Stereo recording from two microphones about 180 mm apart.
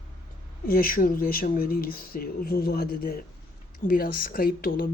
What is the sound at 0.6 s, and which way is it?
Speech, 55° left (ahead or behind).